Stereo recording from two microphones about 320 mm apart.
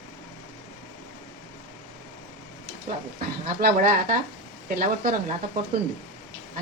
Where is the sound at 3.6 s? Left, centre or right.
Right.